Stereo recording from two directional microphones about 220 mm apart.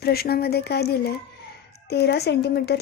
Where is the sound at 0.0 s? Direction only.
45° left (ahead or behind).